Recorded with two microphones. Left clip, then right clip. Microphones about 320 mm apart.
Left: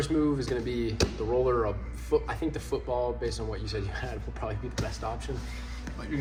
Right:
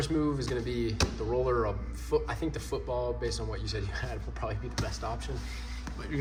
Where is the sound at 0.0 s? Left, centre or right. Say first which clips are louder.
Left 3 dB; centre.